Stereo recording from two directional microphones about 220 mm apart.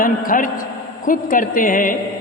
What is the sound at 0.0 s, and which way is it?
A man's voice, 40° left (ahead or behind).